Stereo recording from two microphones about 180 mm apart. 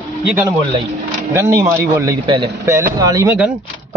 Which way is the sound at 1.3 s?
15° right (ahead or behind).